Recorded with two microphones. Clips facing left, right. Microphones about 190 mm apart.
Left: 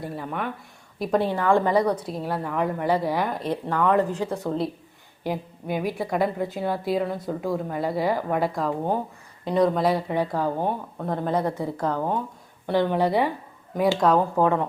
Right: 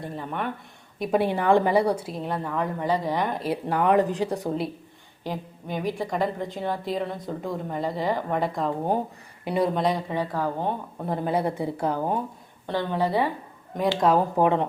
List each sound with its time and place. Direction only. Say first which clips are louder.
0.0 s a woman's voice: left 1 dB; 5° left (ahead or behind)
1.2 s speech: right 1 dB; 15° right (ahead or behind)
1.8 s a woman's voice: even; 30° right (ahead or behind)
2.0 s a woman's voice: left 1 dB; centre (ahead or behind)
3.7 s speech: right 1 dB; 15° right (ahead or behind)
5.2 s a woman's voice: left 4 dB; 10° left (ahead or behind)
9.4 s speech: left 3 dB; 5° right (ahead or behind)
9.8 s a woman's voice: left 3 dB; 10° left (ahead or behind)
11.0 s speech: even; 5° right (ahead or behind)
12.6 s a woman's voice: left 4 dB; 15° left (ahead or behind)
14.3 s a woman's voice: even; 20° right (ahead or behind)